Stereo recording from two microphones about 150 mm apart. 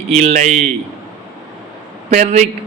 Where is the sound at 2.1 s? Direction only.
55° right (ahead or behind).